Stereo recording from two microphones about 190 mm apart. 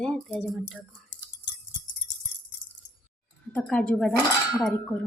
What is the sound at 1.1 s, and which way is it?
Keys jangling, 70° left (ahead or behind).